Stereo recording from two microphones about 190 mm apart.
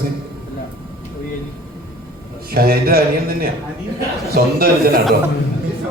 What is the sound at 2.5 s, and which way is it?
A man's voice, 55° right (ahead or behind).